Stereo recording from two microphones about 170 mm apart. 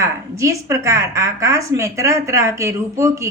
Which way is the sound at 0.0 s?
20° right (ahead or behind).